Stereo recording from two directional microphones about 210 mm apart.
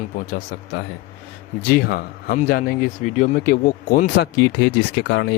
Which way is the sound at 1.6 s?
45° left (ahead or behind).